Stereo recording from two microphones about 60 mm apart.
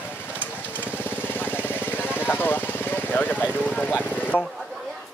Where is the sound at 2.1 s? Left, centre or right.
Left.